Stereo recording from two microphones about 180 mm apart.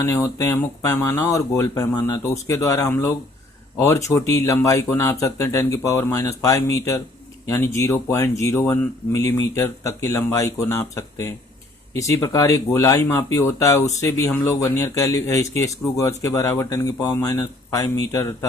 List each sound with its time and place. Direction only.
0.0 s speech: 15° left (ahead or behind)